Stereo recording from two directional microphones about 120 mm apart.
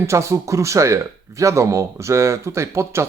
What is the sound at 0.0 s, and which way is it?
Speech, 25° right (ahead or behind).